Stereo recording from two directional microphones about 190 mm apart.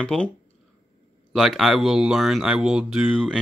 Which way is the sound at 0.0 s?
5° left (ahead or behind).